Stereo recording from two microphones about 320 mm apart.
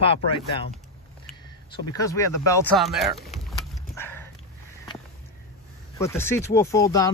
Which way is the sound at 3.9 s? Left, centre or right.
Centre.